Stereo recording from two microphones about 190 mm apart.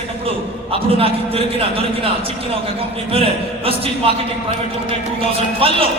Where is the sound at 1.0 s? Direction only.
30° right (ahead or behind).